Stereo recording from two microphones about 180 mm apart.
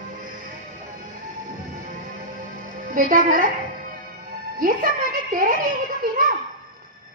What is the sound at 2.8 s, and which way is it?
A woman's voice, 50° right (ahead or behind).